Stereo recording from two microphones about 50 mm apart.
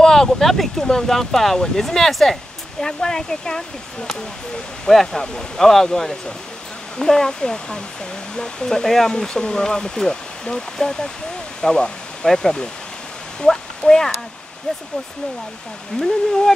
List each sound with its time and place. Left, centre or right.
0.0 s speech: centre
4.8 s speech: centre
15.9 s speech: centre